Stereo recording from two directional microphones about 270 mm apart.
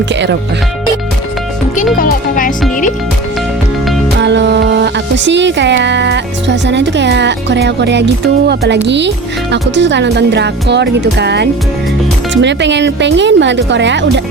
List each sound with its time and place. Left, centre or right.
0.1 s speech: right
2.0 s speech: left
4.2 s speech: right